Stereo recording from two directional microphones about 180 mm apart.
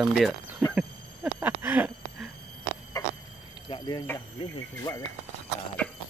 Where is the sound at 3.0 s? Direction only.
20° left (ahead or behind).